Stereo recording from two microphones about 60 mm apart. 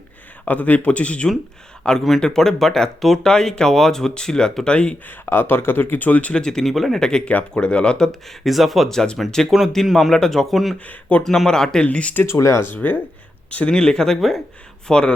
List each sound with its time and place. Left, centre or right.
0.4 s speech: left
5.0 s speech: left
6.3 s speech: centre
8.4 s a man's voice: centre
11.9 s speech: left
12.1 s speech: left
12.5 s speech: left
13.7 s speech: centre
14.8 s speech: centre